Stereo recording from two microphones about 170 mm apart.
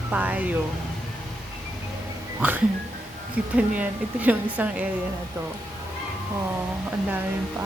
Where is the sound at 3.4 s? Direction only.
5° right (ahead or behind).